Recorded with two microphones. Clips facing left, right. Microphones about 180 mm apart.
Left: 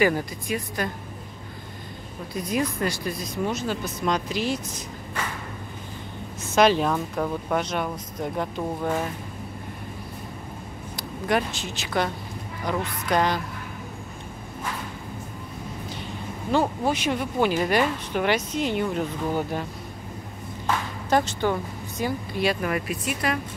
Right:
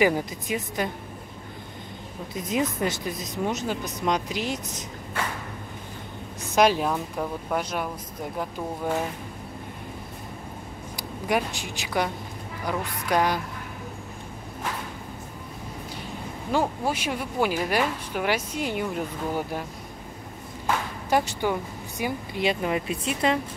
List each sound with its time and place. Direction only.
0.0 s speech: 15° right (ahead or behind)
2.3 s speech: 20° right (ahead or behind)
6.4 s a woman's voice: 10° right (ahead or behind)
11.0 s a woman's voice: 10° right (ahead or behind)
16.5 s a woman's voice: 5° right (ahead or behind)
21.1 s speech: 10° right (ahead or behind)